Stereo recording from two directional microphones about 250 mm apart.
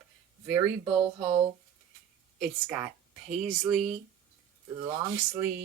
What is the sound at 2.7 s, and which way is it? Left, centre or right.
Speech, centre.